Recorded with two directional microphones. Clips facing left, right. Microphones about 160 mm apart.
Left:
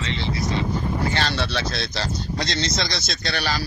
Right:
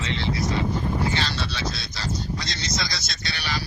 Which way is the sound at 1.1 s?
65° left (ahead or behind).